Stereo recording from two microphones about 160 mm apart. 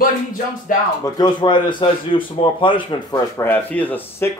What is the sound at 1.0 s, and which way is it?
A man's voice, 25° left (ahead or behind).